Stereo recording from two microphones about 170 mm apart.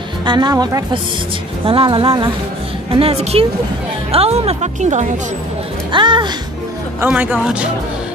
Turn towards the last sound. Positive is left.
turn(degrees=-10)  # may be behind; listen again after turning